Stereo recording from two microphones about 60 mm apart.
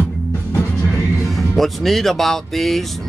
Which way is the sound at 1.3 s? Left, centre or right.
Centre.